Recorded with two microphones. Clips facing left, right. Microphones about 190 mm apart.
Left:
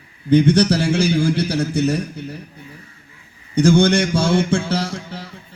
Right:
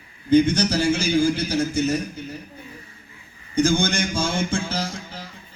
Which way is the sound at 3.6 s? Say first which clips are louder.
Left 6 dB; 70° left (ahead or behind).